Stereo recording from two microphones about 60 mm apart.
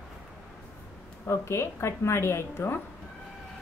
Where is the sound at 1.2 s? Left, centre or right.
Left.